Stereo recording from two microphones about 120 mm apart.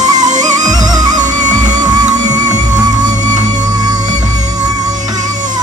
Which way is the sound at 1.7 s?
35° right (ahead or behind).